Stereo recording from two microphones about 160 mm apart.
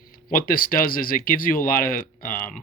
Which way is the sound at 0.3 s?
60° left (ahead or behind).